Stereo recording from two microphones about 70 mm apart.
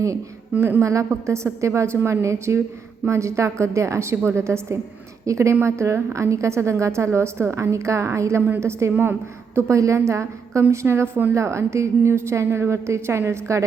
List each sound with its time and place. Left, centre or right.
0.8 s a woman's voice: right
8.4 s a woman's voice: right
9.6 s a woman's voice: right